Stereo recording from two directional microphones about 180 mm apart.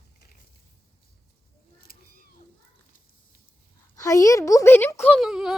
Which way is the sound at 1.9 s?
55° left (ahead or behind).